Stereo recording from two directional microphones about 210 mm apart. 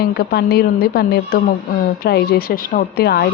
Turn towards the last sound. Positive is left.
turn(degrees=50)  # may be behind; listen again after turning